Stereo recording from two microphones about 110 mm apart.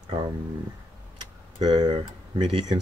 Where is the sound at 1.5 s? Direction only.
40° right (ahead or behind).